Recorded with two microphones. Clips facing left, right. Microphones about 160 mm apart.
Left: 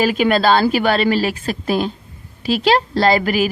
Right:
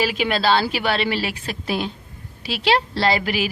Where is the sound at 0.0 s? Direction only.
45° left (ahead or behind).